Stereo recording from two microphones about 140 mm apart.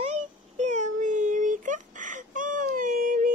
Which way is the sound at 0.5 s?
55° right (ahead or behind).